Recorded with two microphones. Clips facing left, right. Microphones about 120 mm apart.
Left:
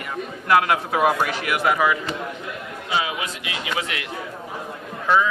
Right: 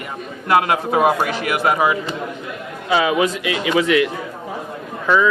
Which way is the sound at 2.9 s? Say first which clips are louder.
Right 9 dB; 75° right (ahead or behind).